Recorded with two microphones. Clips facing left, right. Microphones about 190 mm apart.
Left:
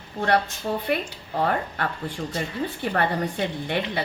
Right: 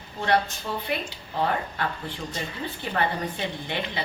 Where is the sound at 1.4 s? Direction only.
55° left (ahead or behind).